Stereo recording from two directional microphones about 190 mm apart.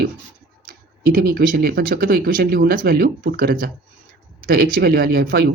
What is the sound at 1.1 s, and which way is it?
Speech, 50° right (ahead or behind).